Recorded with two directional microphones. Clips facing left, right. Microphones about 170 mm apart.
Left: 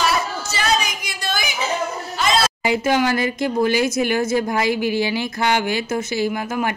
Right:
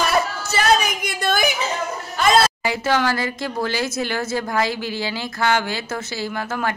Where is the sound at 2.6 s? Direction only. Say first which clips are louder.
Left 2 dB; 15° left (ahead or behind).